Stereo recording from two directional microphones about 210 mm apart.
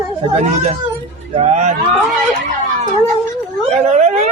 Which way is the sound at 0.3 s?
35° right (ahead or behind).